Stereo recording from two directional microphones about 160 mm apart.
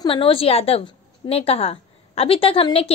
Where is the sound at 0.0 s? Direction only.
35° left (ahead or behind).